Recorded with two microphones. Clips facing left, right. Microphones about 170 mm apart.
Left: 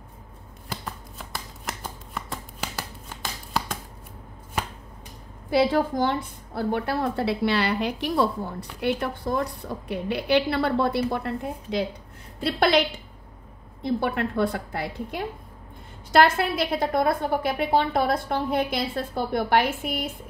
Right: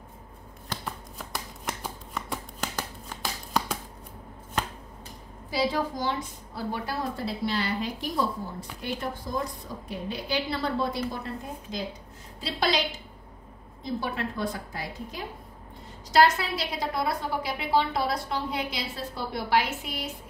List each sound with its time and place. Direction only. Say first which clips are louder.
0.7 s shuffling cards: even; 5° left (ahead or behind)
5.5 s a woman's voice: left 6 dB; 55° left (ahead or behind)